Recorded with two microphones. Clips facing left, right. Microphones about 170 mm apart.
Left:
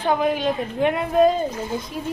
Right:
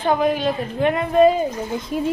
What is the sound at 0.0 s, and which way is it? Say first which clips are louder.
A woman's voice: right 2 dB; 10° left (ahead or behind).